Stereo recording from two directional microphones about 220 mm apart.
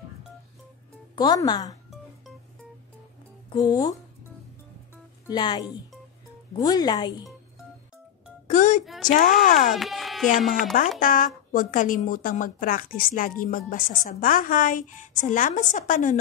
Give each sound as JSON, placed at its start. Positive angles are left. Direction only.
{"t": 1.1, "sound": "speech", "side_deg": 20}
{"t": 3.4, "sound": "speech", "side_deg": 15}
{"t": 5.2, "sound": "speech", "side_deg": 20}
{"t": 8.5, "sound": "speech", "side_deg": 35}
{"t": 9.7, "sound": "speech", "side_deg": 0}
{"t": 11.0, "sound": "speech", "side_deg": 40}